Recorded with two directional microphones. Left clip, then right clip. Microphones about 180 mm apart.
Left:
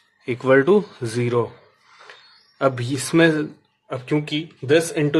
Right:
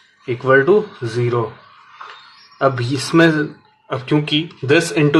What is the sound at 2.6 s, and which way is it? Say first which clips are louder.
Speech: right 4 dB; 35° left (ahead or behind).